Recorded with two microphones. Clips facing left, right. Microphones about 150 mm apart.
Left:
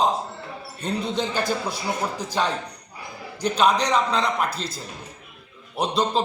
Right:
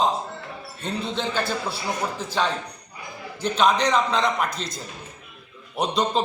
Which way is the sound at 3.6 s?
10° left (ahead or behind).